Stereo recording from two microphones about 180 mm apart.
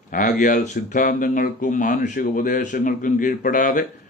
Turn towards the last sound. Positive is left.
turn(degrees=50)  # may be behind; listen again after turning